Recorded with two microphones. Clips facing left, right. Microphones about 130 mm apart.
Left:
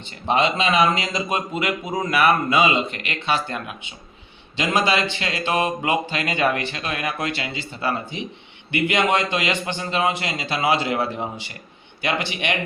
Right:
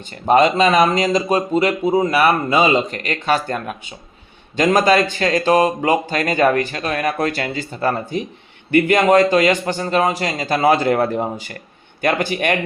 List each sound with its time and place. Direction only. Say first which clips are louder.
0.3 s speech: right 7 dB; 45° right (ahead or behind)